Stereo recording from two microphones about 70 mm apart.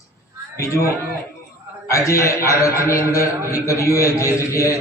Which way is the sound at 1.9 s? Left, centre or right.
Left.